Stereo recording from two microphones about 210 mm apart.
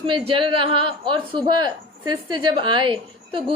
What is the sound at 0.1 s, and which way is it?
A woman's voice, 25° right (ahead or behind).